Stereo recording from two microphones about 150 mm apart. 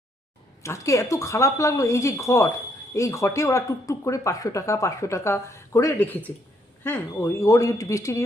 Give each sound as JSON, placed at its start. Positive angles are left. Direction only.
{"t": 0.6, "sound": "speech", "side_deg": 20}